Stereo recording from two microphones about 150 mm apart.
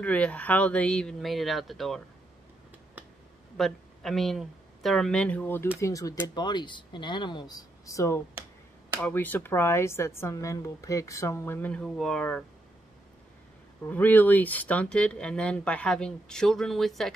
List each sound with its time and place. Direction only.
0.0 s speech: 10° left (ahead or behind)
3.5 s speech: centre (ahead or behind)
13.8 s speech: 10° left (ahead or behind)